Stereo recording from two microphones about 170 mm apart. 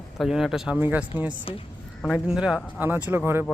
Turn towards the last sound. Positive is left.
turn(degrees=-10)  # may be behind; listen again after turning